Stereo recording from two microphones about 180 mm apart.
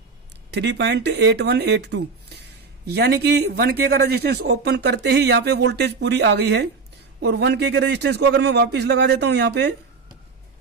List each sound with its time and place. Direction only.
0.5 s speech: 70° right (ahead or behind)